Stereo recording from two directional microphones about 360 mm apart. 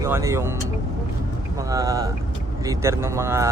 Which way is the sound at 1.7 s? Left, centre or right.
Centre.